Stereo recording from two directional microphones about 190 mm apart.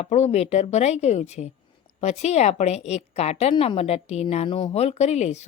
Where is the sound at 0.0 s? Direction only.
35° left (ahead or behind).